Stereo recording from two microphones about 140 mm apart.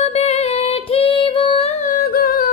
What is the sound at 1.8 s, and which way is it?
Humming, 85° left.